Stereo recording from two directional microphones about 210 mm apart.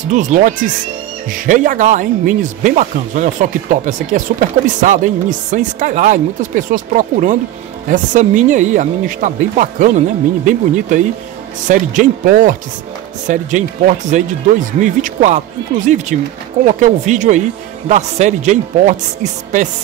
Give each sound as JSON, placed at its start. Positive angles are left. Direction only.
{"t": 0.1, "sound": "speech", "side_deg": -35}